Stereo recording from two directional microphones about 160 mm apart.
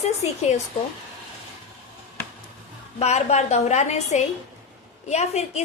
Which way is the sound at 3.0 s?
45° left (ahead or behind).